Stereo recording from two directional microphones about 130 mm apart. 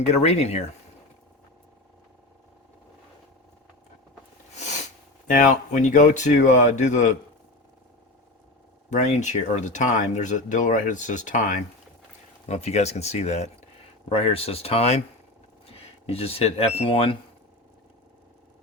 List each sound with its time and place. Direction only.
0.0 s speech: 60° left (ahead or behind)
4.5 s sneeze: 65° left (ahead or behind)
5.3 s speech: 75° left (ahead or behind)
8.9 s speech: 65° left (ahead or behind)
12.5 s speech: 60° left (ahead or behind)